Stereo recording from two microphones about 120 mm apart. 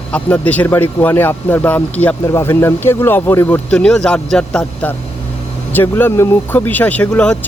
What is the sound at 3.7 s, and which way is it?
Speech, 10° left (ahead or behind).